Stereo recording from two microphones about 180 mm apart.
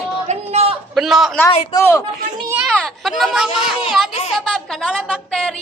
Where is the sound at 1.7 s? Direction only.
15° left (ahead or behind).